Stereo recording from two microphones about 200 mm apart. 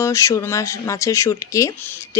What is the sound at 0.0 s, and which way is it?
Speech, 15° left (ahead or behind).